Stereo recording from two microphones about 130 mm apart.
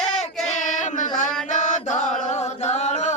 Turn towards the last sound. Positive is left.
turn(degrees=60)  # may be behind; listen again after turning